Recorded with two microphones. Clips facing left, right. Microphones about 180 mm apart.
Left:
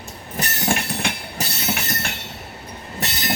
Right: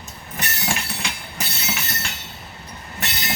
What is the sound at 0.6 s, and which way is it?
Train, 55° left (ahead or behind).